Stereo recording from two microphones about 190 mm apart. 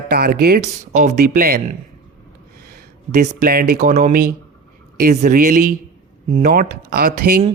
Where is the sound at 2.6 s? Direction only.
50° right (ahead or behind).